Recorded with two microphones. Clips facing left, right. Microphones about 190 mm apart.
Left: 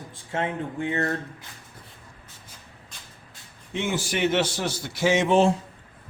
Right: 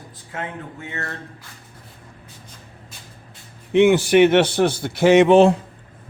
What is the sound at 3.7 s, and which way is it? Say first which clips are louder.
A man's voice: right 14 dB; 65° right (ahead or behind).